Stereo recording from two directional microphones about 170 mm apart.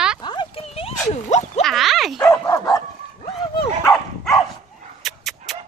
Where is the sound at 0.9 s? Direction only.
40° left (ahead or behind).